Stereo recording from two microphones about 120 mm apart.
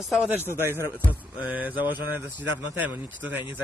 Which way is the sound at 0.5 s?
20° left (ahead or behind).